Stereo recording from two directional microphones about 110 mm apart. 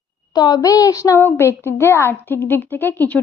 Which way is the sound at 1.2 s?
20° left (ahead or behind).